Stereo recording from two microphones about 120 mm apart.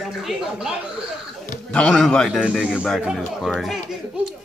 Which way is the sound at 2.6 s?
10° right (ahead or behind).